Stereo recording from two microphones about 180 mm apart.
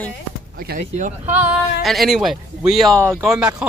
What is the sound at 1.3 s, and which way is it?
Speech, 10° right (ahead or behind).